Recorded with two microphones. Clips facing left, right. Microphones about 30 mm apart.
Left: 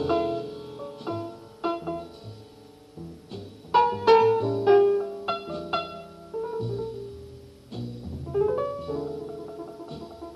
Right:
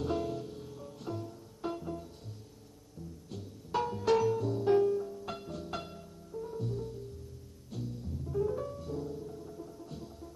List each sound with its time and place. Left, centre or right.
0.0 s music: left
3.3 s music: left